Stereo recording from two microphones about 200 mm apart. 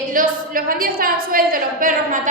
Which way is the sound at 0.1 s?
45° right (ahead or behind).